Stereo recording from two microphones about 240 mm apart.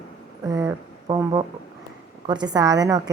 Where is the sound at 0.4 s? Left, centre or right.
Centre.